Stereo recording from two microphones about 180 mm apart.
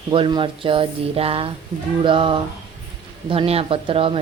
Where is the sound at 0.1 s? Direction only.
25° right (ahead or behind).